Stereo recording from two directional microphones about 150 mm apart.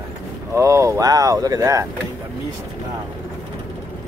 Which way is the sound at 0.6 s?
20° right (ahead or behind).